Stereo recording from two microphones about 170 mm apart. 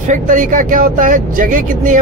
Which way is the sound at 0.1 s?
50° right (ahead or behind).